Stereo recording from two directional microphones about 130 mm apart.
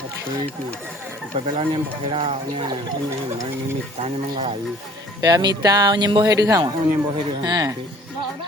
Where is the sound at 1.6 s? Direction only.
40° right (ahead or behind).